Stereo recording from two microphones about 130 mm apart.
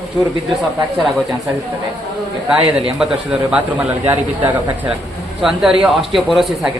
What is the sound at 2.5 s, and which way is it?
A man's voice, 5° right (ahead or behind).